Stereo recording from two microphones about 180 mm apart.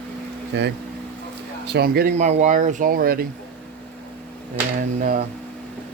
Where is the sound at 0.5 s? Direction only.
75° right (ahead or behind).